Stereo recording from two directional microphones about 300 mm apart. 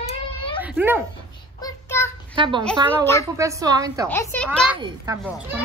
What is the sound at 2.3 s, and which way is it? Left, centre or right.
A woman's voice, centre.